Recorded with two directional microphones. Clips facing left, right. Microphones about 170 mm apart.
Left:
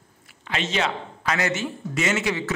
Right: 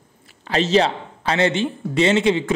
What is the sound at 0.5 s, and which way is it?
A man's voice, 35° right (ahead or behind).